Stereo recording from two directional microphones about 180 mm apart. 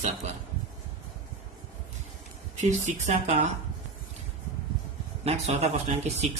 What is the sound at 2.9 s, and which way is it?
Speech, 40° right (ahead or behind).